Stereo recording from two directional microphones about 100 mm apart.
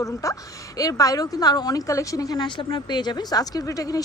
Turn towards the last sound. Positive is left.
turn(degrees=35)  # may be behind; listen again after turning